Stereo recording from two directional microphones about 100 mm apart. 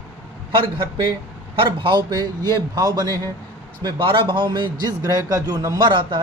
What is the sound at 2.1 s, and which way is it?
Speech, 40° right (ahead or behind).